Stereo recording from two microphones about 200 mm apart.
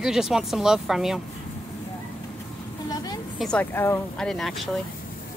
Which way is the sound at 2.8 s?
20° left (ahead or behind).